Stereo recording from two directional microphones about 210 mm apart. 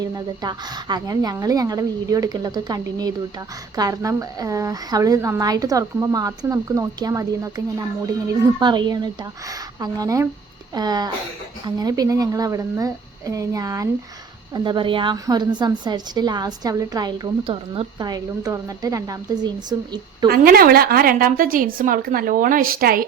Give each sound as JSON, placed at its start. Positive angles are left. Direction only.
{"t": 0.0, "sound": "a woman's voice", "side_deg": -20}
{"t": 20.2, "sound": "a woman's voice", "side_deg": -45}